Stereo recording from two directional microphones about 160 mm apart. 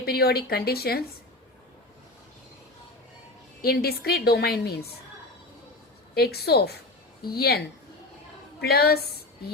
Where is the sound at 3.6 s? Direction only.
75° left (ahead or behind).